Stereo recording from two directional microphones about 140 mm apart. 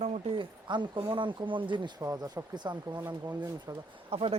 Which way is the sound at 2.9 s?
10° right (ahead or behind).